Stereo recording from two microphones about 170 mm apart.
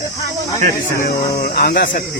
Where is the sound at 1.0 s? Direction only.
65° left (ahead or behind).